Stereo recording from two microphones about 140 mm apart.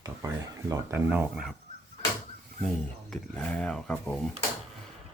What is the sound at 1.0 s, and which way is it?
Speech, 10° right (ahead or behind).